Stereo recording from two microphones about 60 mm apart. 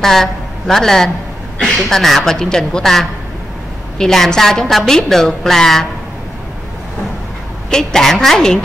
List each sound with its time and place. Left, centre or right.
0.0 s a woman's voice: centre
7.7 s a woman's voice: centre